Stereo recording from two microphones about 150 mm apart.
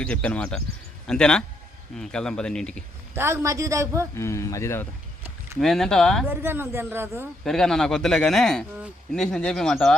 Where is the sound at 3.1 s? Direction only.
15° right (ahead or behind).